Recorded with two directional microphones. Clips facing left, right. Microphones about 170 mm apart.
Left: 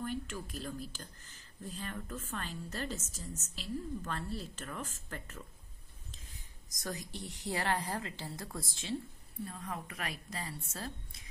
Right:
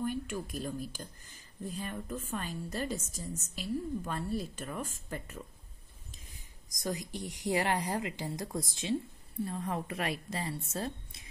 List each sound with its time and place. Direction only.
0.0 s speech: 15° right (ahead or behind)
6.7 s speech: 15° right (ahead or behind)
9.5 s a woman's voice: 30° right (ahead or behind)